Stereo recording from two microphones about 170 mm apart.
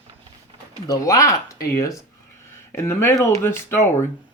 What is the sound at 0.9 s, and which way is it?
Speech, 20° left (ahead or behind).